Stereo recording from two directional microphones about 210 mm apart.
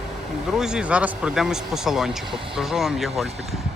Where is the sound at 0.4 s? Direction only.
Centre (ahead or behind).